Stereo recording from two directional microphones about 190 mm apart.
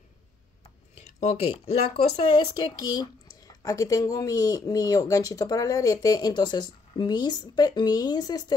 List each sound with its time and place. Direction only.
1.5 s speech: 30° left (ahead or behind)